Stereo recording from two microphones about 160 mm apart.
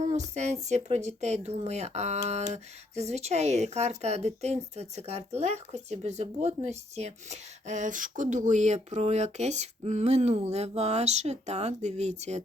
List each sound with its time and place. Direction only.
0.0 s speech: 45° right (ahead or behind)